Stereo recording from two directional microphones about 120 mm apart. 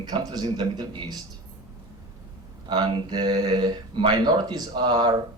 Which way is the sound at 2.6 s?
40° right (ahead or behind).